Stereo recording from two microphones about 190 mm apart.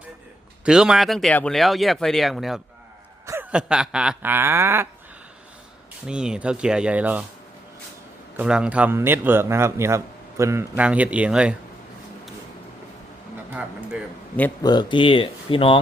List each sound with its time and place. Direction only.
0.6 s a man's voice: 5° right (ahead or behind)
6.1 s speech: 5° right (ahead or behind)
8.4 s a man's voice: 5° right (ahead or behind)
13.5 s a man's voice: 5° right (ahead or behind)
14.6 s speech: 20° left (ahead or behind)